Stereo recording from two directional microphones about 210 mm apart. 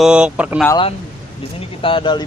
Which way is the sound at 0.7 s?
25° left (ahead or behind).